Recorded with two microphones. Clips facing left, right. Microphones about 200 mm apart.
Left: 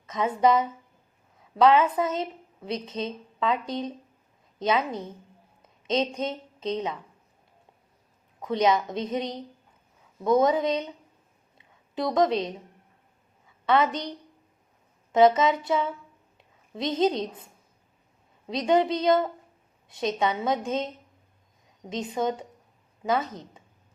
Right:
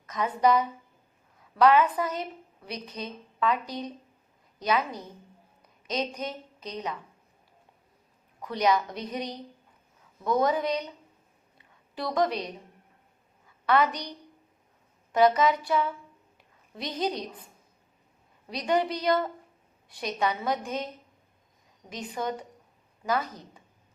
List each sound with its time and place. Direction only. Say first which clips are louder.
0.1 s a woman's voice: left 2 dB; 25° left (ahead or behind)
8.4 s a woman's voice: left 2 dB; 25° left (ahead or behind)
11.5 s a sound: left 6 dB; 20° left (ahead or behind)
13.7 s a woman's voice: left 1 dB; 25° left (ahead or behind)